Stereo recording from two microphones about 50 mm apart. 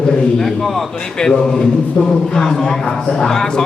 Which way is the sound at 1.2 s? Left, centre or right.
Centre.